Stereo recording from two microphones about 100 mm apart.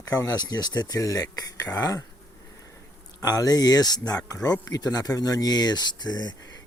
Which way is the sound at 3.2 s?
40° left (ahead or behind).